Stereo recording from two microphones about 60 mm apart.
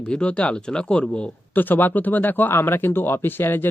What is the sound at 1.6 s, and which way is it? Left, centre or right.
A man's voice, left.